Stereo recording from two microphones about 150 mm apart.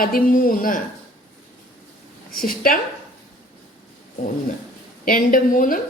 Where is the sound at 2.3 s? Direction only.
75° left (ahead or behind).